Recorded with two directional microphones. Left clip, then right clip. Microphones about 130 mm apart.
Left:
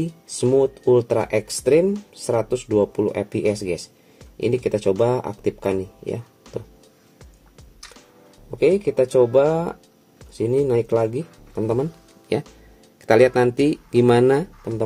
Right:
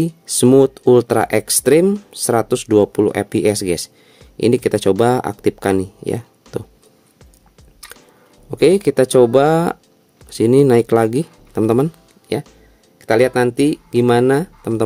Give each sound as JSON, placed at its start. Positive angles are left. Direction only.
{"t": 0.6, "sound": "speech", "side_deg": -80}
{"t": 2.1, "sound": "speech", "side_deg": -75}
{"t": 6.5, "sound": "a sound", "side_deg": -90}
{"t": 8.5, "sound": "speech", "side_deg": -70}
{"t": 12.3, "sound": "speech", "side_deg": -20}
{"t": 13.3, "sound": "speech", "side_deg": -25}